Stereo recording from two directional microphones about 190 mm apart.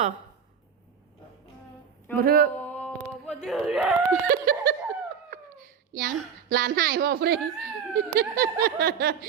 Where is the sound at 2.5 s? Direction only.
5° left (ahead or behind).